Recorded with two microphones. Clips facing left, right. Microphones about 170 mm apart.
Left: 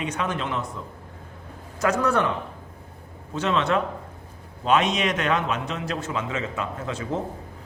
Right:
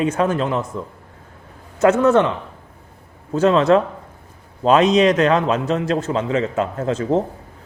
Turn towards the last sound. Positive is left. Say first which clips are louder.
# right 10 dB
turn(degrees=-40)  # may be behind; listen again after turning